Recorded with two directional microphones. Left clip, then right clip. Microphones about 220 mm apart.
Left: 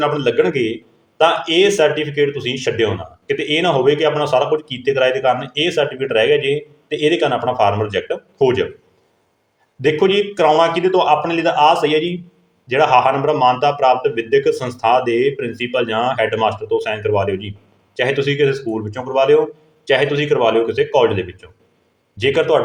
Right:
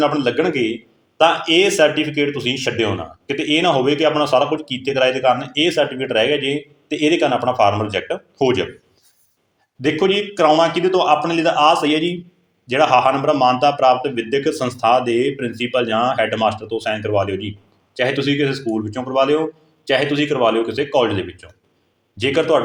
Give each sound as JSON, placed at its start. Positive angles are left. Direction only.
{"t": 0.0, "sound": "speech", "side_deg": -15}
{"t": 9.8, "sound": "speech", "side_deg": -15}